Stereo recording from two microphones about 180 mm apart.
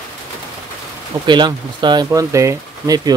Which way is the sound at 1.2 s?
25° right (ahead or behind).